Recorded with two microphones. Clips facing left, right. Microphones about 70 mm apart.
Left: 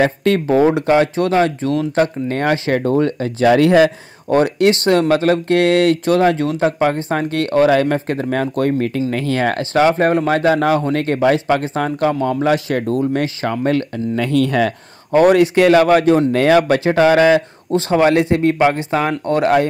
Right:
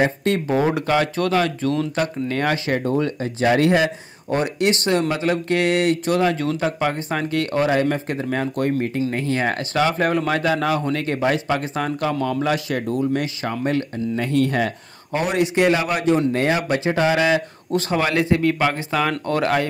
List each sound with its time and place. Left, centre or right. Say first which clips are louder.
0.0 s speech: left 5 dB; left
0.5 s speech: left 7 dB; left
0.8 s speech: left 5 dB; left
3.4 s speech: left 6 dB; left
7.7 s speech: left 5 dB; left
9.1 s speech: left 4 dB; left
9.8 s speech: left 6 dB; left
14.1 s speech: left 4 dB; left
15.1 s speech: left 9 dB; left
16.3 s speech: left 8 dB; left
16.8 s speech: left 7 dB; left
17.7 s speech: left 7 dB; left